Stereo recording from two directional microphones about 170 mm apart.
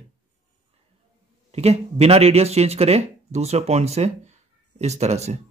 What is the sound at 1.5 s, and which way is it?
Speech, 40° right (ahead or behind).